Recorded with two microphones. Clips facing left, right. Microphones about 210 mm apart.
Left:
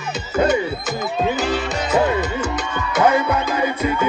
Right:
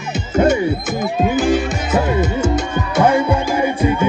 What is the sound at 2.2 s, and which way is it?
Music, 25° right (ahead or behind).